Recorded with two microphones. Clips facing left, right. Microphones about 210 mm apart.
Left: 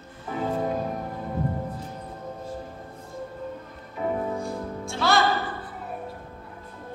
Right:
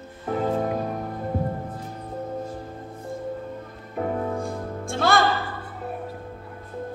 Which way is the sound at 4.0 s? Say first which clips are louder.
Right 1 dB; 50° right (ahead or behind).